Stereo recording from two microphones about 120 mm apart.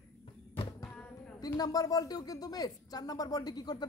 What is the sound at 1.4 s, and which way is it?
Speech, 30° left (ahead or behind).